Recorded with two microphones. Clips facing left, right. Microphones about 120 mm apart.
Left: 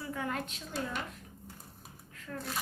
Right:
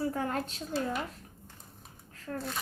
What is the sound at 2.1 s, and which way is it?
Shuffling cards, 35° right (ahead or behind).